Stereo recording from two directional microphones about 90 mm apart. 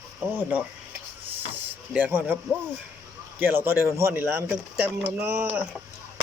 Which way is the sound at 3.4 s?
25° right (ahead or behind).